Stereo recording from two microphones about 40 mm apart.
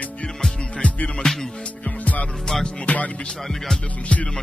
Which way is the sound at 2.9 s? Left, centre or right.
Left.